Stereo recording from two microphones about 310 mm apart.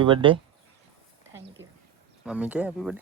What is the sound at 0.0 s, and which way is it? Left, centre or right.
Speech, centre.